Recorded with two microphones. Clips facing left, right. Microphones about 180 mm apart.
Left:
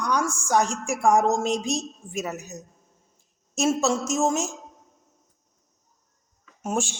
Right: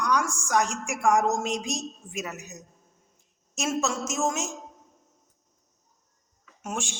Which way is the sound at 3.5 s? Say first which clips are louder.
Left 5 dB; 35° left (ahead or behind).